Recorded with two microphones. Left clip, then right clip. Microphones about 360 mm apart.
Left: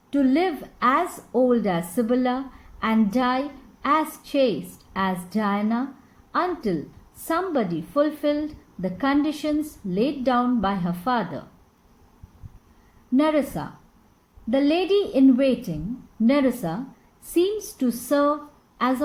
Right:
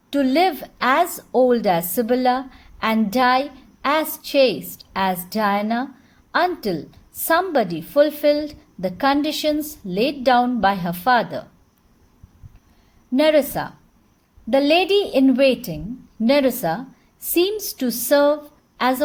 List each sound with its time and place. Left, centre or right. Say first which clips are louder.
0.1 s a woman's voice: right 4 dB; right
13.1 s a woman's voice: right 5 dB; right